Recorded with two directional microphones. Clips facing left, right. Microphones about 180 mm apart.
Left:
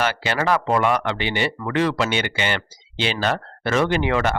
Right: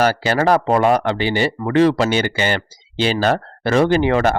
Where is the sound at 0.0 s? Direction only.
40° right (ahead or behind).